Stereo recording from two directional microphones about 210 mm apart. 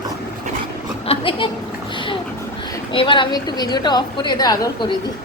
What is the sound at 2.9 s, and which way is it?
Speech, 25° left (ahead or behind).